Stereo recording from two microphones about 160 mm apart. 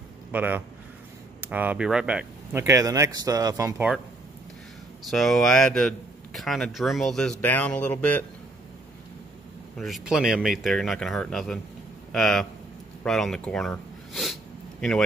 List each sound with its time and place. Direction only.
0.3 s speech: 10° right (ahead or behind)
5.1 s speech: centre (ahead or behind)
9.8 s speech: centre (ahead or behind)
13.0 s a sound: 5° left (ahead or behind)